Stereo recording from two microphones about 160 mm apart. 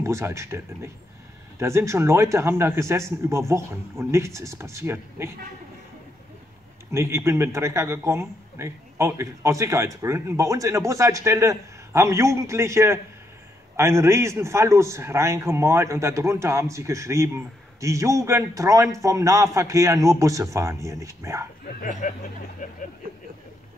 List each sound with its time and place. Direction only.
0.0 s speech: 20° right (ahead or behind)
6.9 s a man's voice: 15° right (ahead or behind)
21.8 s speech: 55° left (ahead or behind)